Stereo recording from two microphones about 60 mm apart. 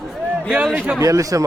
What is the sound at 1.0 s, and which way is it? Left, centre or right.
Speech, right.